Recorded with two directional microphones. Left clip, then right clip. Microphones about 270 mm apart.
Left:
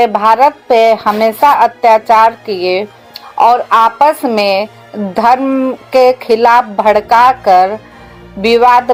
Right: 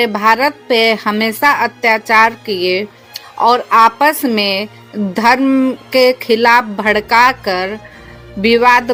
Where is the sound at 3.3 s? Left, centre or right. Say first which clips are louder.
Left 2 dB; right.